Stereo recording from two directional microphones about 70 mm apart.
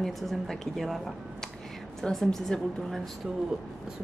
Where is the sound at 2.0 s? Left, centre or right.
Centre.